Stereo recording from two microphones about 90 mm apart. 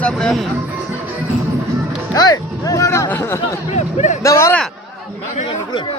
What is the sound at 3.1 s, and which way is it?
Speech, 25° left (ahead or behind).